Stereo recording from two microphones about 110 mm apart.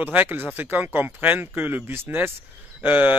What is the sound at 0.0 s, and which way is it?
A man's voice, 15° right (ahead or behind).